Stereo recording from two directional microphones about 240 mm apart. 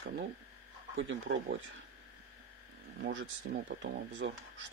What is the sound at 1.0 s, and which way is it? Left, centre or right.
Speech, right.